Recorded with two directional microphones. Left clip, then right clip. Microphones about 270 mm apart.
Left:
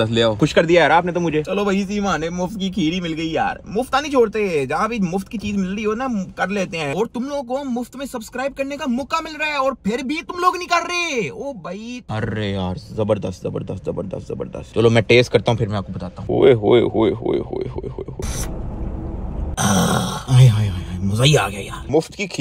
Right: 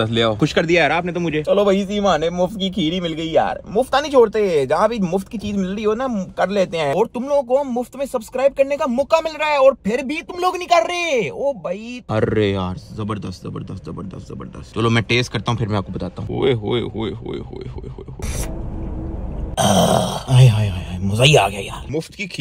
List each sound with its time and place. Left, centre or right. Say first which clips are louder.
0.0 s speech: left 1 dB; centre
12.1 s speech: right 8 dB; right
12.6 s speech: left 7 dB; centre
19.5 s speech: right 4 dB; centre